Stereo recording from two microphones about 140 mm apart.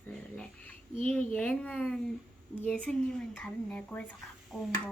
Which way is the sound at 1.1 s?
10° left (ahead or behind).